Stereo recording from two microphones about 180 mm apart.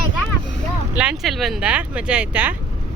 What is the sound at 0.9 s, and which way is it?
A woman's voice, 5° right (ahead or behind).